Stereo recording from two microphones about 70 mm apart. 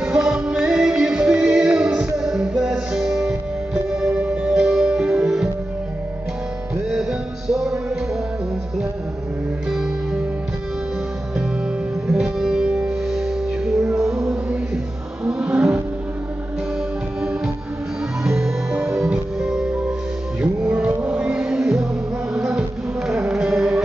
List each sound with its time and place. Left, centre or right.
0.0 s music: centre
6.9 s music: centre
9.7 s music: centre
12.1 s music: centre
18.2 s music: centre
20.6 s music: centre